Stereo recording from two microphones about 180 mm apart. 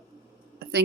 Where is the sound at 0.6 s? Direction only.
60° right (ahead or behind).